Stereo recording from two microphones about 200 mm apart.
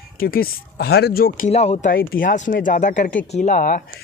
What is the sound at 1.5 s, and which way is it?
Speech, 30° left (ahead or behind).